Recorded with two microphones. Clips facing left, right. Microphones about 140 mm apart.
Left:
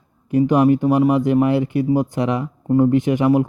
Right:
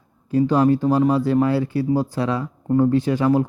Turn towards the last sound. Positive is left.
turn(degrees=20)  # may be behind; listen again after turning